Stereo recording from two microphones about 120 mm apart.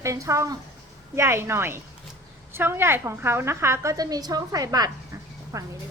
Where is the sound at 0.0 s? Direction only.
25° right (ahead or behind).